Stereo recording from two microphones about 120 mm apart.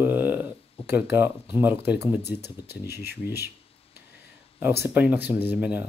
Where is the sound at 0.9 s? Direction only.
15° right (ahead or behind).